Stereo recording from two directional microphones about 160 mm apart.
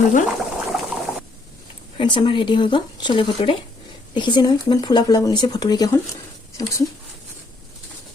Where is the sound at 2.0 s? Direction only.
30° left (ahead or behind).